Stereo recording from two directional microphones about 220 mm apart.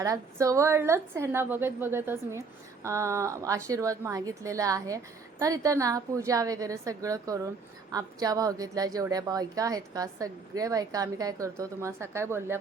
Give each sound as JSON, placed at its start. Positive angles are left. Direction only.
{"t": 0.0, "sound": "a woman's voice", "side_deg": -15}